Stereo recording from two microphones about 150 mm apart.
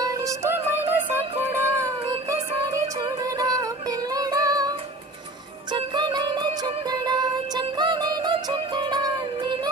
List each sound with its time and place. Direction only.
0.0 s music: 20° right (ahead or behind)
5.7 s music: 30° right (ahead or behind)